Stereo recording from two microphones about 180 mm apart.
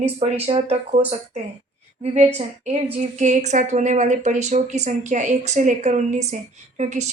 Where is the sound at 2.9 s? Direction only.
40° right (ahead or behind).